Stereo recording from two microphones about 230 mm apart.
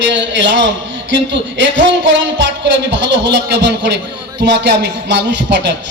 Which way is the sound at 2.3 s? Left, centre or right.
Right.